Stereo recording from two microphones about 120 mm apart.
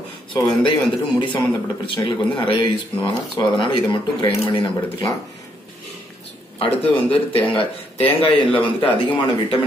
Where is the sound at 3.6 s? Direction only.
40° left (ahead or behind).